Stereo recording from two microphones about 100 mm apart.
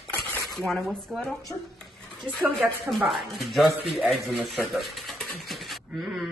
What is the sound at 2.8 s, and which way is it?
Speech, centre (ahead or behind).